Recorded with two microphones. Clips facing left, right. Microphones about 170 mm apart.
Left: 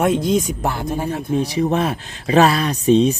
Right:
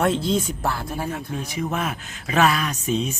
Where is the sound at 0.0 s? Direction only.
15° left (ahead or behind).